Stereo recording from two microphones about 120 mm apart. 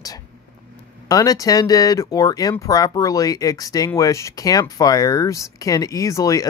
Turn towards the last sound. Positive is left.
turn(degrees=25)  # may be behind; listen again after turning